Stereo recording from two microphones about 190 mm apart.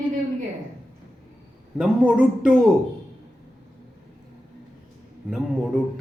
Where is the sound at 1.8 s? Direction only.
5° right (ahead or behind).